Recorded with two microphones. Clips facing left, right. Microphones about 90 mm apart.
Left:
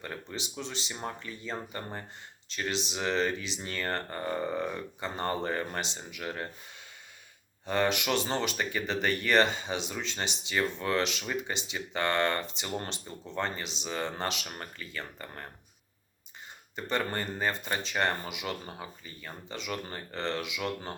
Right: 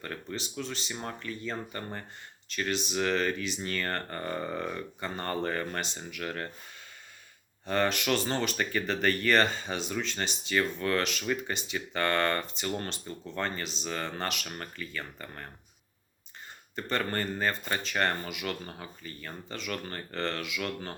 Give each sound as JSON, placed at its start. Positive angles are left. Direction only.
{"t": 0.0, "sound": "speech", "side_deg": 20}
{"t": 7.7, "sound": "speech", "side_deg": 15}
{"t": 16.7, "sound": "speech", "side_deg": 15}